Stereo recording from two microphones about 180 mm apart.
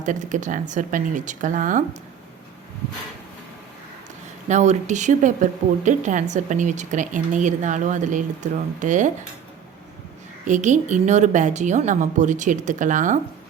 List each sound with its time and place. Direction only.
0.0 s a woman's voice: 45° right (ahead or behind)
4.4 s a woman's voice: 40° right (ahead or behind)
10.4 s a woman's voice: 45° right (ahead or behind)